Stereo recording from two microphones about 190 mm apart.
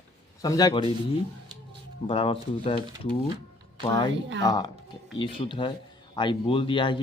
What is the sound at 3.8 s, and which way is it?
A man's voice, 25° left (ahead or behind).